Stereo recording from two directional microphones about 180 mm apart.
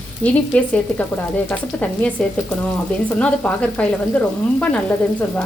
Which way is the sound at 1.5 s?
5° left (ahead or behind).